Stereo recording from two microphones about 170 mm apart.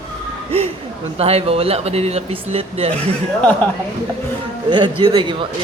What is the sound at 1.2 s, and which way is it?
Speech, 35° right (ahead or behind).